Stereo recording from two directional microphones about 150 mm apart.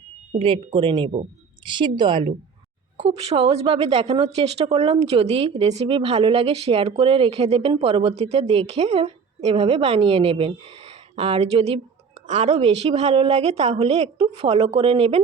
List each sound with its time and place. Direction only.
0.3 s a woman's voice: 35° right (ahead or behind)
3.0 s a woman's voice: 45° right (ahead or behind)